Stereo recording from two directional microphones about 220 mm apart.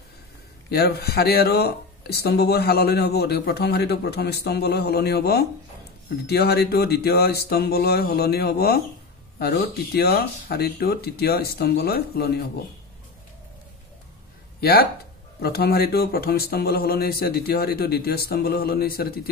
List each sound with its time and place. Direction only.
0.7 s speech: 45° left (ahead or behind)
14.6 s speech: 45° left (ahead or behind)